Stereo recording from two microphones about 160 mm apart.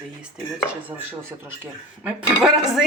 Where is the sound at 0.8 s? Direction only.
10° right (ahead or behind).